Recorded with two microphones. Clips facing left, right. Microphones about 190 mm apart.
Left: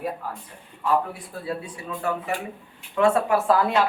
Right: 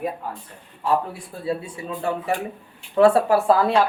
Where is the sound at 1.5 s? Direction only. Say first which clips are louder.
Right 5 dB; 30° right (ahead or behind).